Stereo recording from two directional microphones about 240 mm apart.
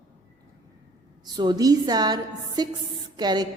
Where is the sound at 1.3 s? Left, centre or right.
Centre.